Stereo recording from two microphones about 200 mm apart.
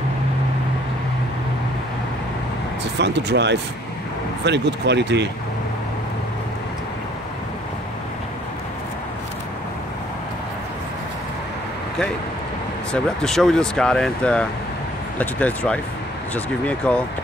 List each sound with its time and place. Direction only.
3.0 s speech: 60° right (ahead or behind)
12.9 s speech: 5° left (ahead or behind)